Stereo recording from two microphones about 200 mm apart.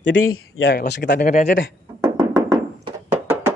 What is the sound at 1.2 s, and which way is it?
Speech, 40° left (ahead or behind).